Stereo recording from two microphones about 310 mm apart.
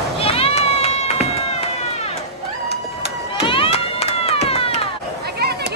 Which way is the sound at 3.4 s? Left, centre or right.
Centre.